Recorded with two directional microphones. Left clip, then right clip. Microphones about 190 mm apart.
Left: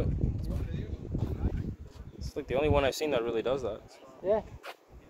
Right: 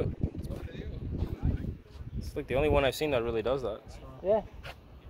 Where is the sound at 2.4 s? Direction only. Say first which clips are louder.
Even; 15° right (ahead or behind).